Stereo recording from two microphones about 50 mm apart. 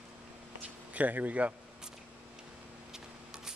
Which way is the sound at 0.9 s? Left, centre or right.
Right.